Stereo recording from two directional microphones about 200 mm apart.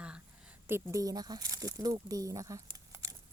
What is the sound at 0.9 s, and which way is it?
Speech, 20° right (ahead or behind).